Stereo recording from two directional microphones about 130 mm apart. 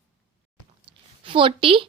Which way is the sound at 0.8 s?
40° right (ahead or behind).